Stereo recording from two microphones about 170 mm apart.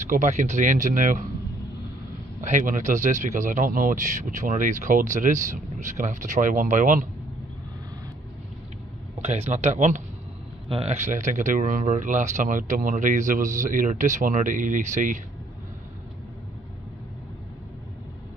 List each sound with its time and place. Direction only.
0.0 s speech: 45° right (ahead or behind)
2.4 s speech: 50° right (ahead or behind)
9.2 s speech: 40° right (ahead or behind)